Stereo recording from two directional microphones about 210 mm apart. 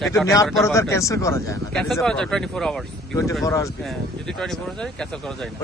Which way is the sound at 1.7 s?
Centre (ahead or behind).